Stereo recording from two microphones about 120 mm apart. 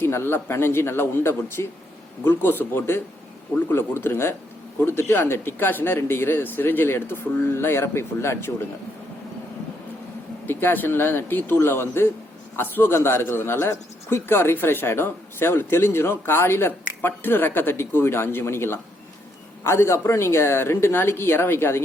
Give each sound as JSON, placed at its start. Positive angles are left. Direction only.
{"t": 0.0, "sound": "a man's voice", "side_deg": 20}
{"t": 10.4, "sound": "a man's voice", "side_deg": 15}